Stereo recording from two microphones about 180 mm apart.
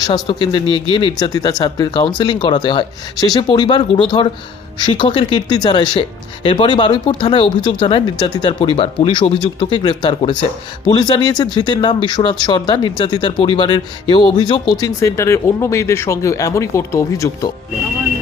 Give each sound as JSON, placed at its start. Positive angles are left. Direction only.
{"t": 0.0, "sound": "a man's voice", "side_deg": 25}